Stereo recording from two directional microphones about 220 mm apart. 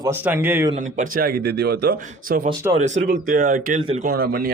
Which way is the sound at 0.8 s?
35° right (ahead or behind).